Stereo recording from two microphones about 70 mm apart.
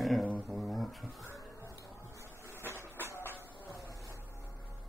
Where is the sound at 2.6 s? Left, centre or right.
Left.